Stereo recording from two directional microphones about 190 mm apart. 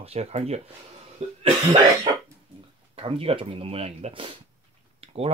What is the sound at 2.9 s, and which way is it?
Speech, 30° right (ahead or behind).